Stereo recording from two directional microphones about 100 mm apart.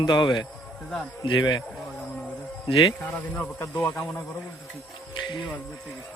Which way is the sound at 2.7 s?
65° left (ahead or behind).